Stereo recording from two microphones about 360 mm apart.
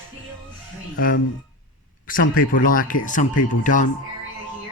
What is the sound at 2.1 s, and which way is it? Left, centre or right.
Speech, left.